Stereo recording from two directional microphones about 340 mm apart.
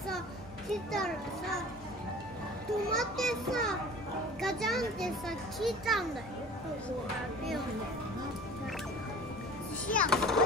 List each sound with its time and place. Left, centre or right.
0.7 s a child's voice: centre
2.9 s a child's voice: centre
9.9 s a child's voice: centre